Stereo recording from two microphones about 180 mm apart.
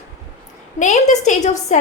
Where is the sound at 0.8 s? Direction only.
40° left (ahead or behind).